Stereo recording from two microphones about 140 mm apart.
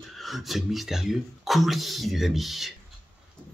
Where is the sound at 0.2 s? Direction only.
Centre (ahead or behind).